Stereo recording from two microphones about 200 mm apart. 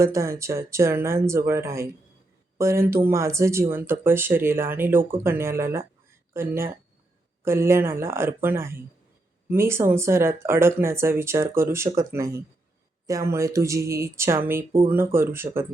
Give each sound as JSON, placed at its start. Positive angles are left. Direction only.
{"t": 0.0, "sound": "speech", "side_deg": -15}